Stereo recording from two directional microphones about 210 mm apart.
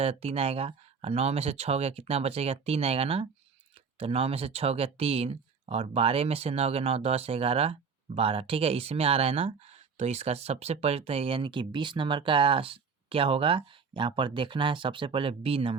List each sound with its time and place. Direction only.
0.0 s speech: 30° right (ahead or behind)